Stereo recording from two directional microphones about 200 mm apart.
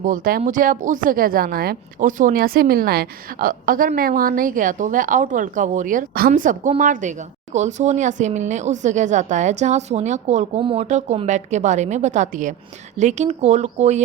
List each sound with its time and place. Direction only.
0.0 s speech: 45° right (ahead or behind)